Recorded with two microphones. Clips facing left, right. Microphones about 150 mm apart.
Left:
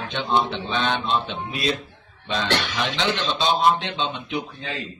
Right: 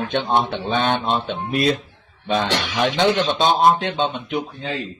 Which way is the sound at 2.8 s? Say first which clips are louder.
Right 7 dB; 60° right (ahead or behind).